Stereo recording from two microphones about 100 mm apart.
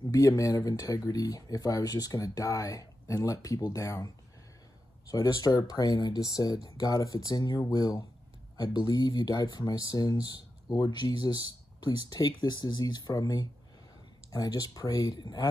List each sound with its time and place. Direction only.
0.1 s speech: 35° left (ahead or behind)
10.2 s speech: 45° left (ahead or behind)